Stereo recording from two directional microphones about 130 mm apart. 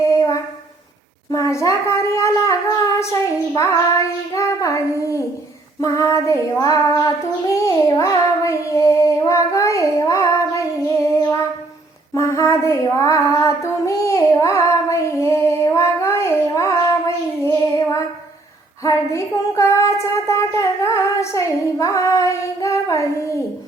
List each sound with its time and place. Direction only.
0.1 s a sound: 25° left (ahead or behind)
3.0 s child singing: 25° left (ahead or behind)
12.1 s female singing: 25° left (ahead or behind)
17.4 s child singing: 25° left (ahead or behind)